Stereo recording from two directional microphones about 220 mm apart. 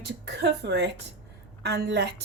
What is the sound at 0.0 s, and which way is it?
A woman's voice, 50° right (ahead or behind).